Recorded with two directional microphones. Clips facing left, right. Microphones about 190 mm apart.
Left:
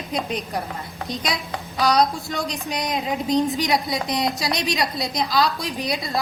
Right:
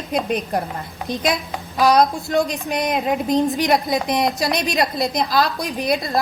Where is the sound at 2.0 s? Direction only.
55° right (ahead or behind).